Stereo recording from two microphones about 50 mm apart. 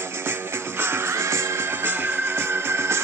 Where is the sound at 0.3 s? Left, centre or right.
Right.